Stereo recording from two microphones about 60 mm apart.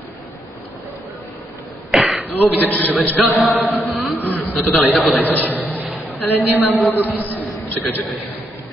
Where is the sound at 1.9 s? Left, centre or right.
Centre.